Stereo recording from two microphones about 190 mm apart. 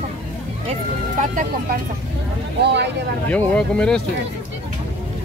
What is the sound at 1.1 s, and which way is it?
Speech, 45° right (ahead or behind).